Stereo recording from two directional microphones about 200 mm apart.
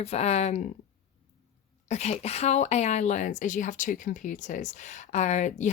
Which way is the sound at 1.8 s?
35° left (ahead or behind).